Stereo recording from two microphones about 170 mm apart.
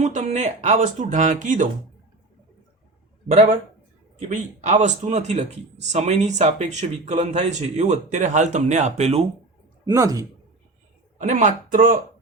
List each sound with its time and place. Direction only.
0.0 s speech: 40° right (ahead or behind)
4.2 s speech: 45° right (ahead or behind)
9.8 s speech: 20° right (ahead or behind)
11.2 s speech: 45° right (ahead or behind)